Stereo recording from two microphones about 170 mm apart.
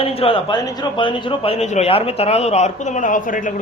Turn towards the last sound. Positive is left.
turn(degrees=50)  # may be behind; listen again after turning